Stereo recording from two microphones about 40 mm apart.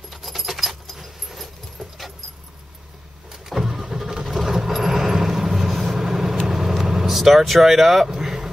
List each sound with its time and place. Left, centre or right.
0.1 s dog: centre
3.3 s vehicle: centre